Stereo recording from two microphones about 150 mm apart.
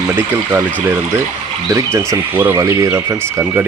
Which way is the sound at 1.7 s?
20° right (ahead or behind).